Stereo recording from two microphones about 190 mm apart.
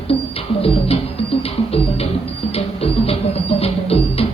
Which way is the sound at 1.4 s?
30° left (ahead or behind).